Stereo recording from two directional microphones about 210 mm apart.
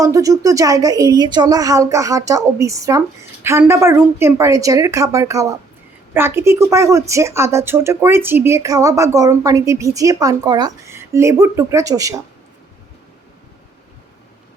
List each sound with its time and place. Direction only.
0.0 s a woman's voice: 15° right (ahead or behind)